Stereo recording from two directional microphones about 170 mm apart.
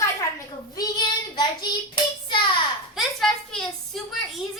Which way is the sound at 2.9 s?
Centre (ahead or behind).